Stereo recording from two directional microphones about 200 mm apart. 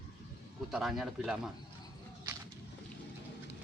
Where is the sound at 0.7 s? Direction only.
Centre (ahead or behind).